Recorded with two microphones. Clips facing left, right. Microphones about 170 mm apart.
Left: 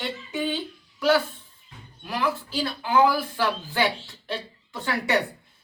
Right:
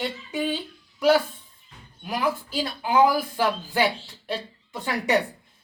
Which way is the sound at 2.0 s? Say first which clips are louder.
Right 1 dB; 15° right (ahead or behind).